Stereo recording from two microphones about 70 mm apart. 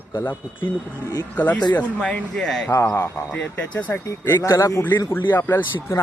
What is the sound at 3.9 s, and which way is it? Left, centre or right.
Speech, left.